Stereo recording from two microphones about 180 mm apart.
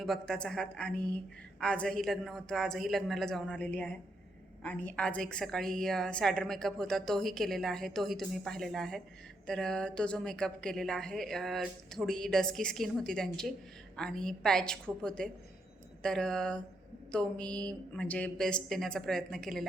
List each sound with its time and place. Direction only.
0.0 s a woman's voice: centre (ahead or behind)